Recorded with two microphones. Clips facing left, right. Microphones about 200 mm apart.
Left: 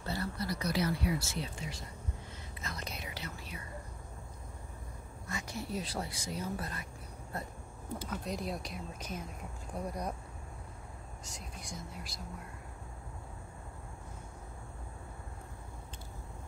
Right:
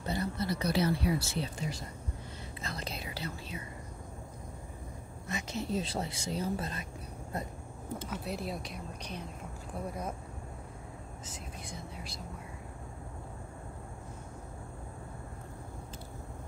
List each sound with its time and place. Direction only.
0.0 s speech: 20° right (ahead or behind); by 1.8 s 35° right (ahead or behind)
2.6 s whispering: 30° right (ahead or behind)
5.3 s speech: 20° right (ahead or behind)
8.1 s speech: 5° right (ahead or behind)
11.2 s speech: centre (ahead or behind)